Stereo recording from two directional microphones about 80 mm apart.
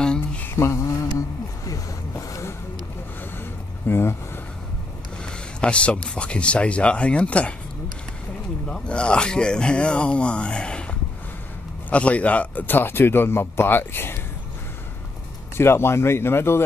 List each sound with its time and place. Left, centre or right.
0.0 s mantra: centre
0.6 s mantra: left
1.7 s vehicle: left
3.8 s a sound: left
5.2 s speech: centre
8.6 s speech: centre
11.9 s a man's voice: centre
15.5 s speech: left